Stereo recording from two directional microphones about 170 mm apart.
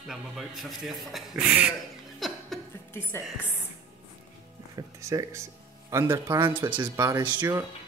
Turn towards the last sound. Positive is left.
turn(degrees=-20)  # may be behind; listen again after turning